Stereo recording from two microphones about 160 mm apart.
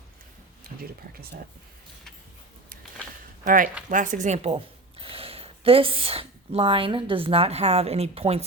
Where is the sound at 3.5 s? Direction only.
55° right (ahead or behind).